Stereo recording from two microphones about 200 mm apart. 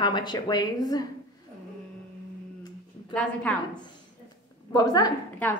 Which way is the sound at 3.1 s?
5° left (ahead or behind).